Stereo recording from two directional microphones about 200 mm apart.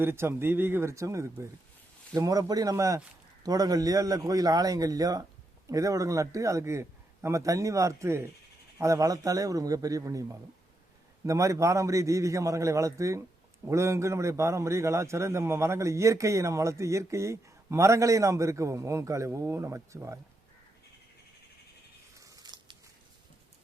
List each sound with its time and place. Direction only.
0.0 s a man's voice: 10° right (ahead or behind)
11.3 s a man's voice: 15° right (ahead or behind)
22.2 s scissors: 15° right (ahead or behind)